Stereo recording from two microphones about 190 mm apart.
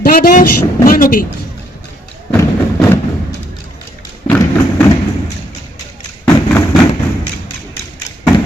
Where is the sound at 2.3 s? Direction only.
15° left (ahead or behind).